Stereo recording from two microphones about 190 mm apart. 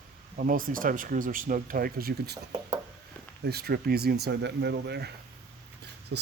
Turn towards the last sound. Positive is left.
turn(degrees=-65)  # may be behind; listen again after turning